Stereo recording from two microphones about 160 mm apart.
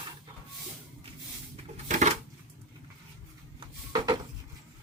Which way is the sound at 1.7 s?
50° right (ahead or behind).